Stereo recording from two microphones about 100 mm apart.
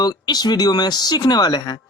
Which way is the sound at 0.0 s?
45° left (ahead or behind).